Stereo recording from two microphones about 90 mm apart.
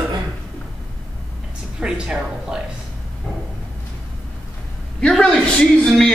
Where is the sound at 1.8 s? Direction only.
10° right (ahead or behind).